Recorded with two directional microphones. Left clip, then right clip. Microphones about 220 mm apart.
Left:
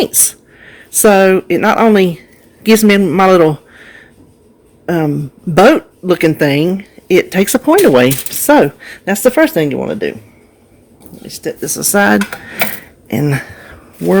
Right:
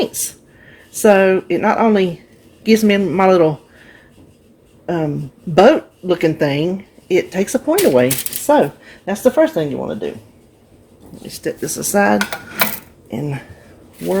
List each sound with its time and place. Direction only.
0.0 s speech: 30° left (ahead or behind)
11.2 s speech: 15° left (ahead or behind)
13.1 s speech: 50° left (ahead or behind)